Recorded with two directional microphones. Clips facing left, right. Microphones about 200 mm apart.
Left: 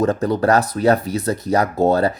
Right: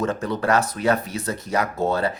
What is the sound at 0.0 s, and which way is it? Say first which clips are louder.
Speech: left 6 dB; 35° left (ahead or behind).